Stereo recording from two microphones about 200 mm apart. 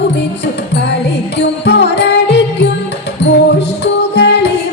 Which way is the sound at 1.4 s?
60° left (ahead or behind).